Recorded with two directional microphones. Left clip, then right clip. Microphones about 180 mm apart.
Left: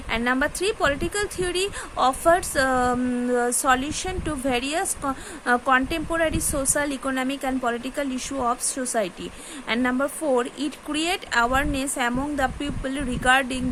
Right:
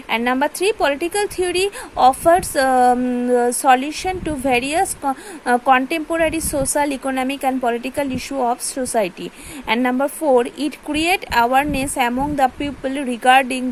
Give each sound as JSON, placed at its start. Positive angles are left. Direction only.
{"t": 0.1, "sound": "a woman's voice", "side_deg": -20}